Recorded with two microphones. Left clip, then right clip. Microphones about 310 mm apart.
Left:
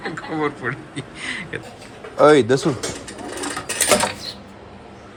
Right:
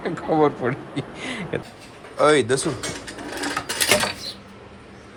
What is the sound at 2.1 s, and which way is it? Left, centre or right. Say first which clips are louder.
Speech: left 4 dB; centre.